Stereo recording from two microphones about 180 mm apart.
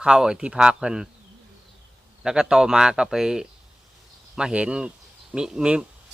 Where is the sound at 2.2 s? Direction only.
5° right (ahead or behind).